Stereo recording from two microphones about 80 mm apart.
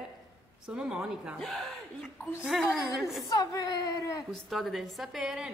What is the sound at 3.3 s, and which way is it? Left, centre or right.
Speech, left.